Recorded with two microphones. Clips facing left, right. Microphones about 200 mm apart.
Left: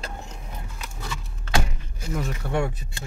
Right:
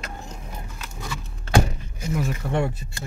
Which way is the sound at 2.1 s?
5° right (ahead or behind).